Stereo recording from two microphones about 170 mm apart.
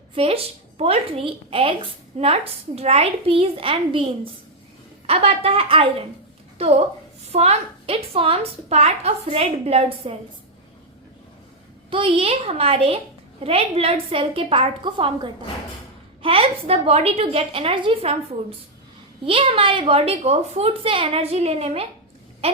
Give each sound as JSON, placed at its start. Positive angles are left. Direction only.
{"t": 0.1, "sound": "a woman's voice", "side_deg": -35}
{"t": 11.9, "sound": "a woman's voice", "side_deg": -30}
{"t": 19.2, "sound": "a woman's voice", "side_deg": -35}